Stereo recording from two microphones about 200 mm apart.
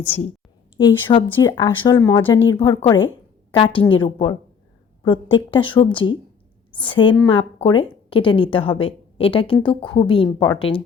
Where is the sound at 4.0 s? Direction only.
25° left (ahead or behind).